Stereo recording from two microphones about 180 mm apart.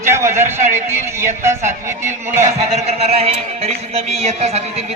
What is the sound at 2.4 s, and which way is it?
Speech, 35° right (ahead or behind).